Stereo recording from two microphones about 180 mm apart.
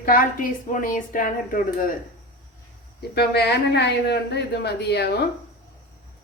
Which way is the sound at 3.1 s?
65° left (ahead or behind).